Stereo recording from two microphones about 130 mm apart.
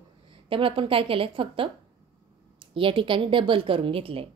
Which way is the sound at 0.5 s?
45° right (ahead or behind).